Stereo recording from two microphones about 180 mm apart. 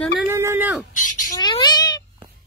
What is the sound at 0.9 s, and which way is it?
Squawk, 50° left (ahead or behind).